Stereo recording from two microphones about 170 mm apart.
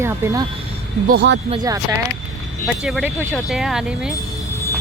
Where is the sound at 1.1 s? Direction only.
90° right.